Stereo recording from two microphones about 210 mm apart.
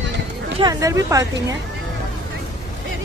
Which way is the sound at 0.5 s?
20° right (ahead or behind).